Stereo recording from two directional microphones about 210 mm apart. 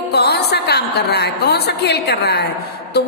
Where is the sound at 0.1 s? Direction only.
50° left (ahead or behind).